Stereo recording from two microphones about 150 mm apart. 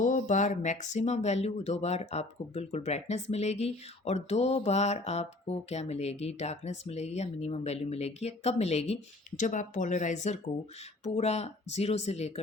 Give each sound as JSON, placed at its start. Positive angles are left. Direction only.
{"t": 0.0, "sound": "speech", "side_deg": 55}